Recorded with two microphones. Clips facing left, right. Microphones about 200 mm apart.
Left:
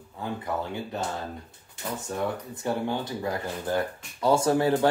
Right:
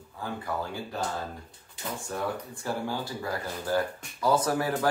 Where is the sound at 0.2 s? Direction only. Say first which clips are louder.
Left 2 dB; 20° left (ahead or behind).